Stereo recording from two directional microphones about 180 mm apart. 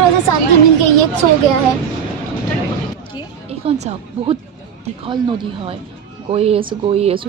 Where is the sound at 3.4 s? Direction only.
35° right (ahead or behind).